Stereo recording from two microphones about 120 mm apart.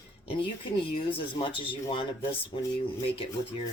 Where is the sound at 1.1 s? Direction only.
45° left (ahead or behind).